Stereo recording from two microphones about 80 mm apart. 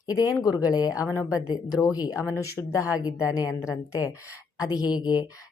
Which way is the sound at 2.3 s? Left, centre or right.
Left.